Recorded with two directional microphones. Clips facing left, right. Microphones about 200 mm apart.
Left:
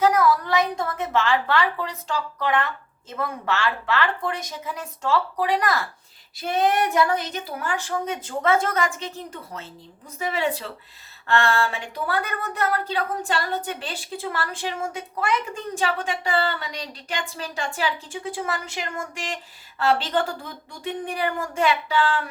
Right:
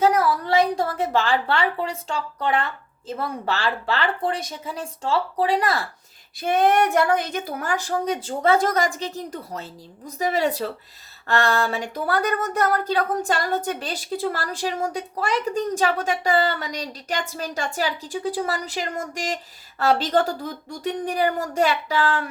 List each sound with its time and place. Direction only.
0.0 s a woman's voice: 30° right (ahead or behind)
6.3 s speech: 50° right (ahead or behind)